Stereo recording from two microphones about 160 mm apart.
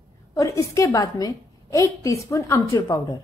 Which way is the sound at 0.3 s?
20° left (ahead or behind).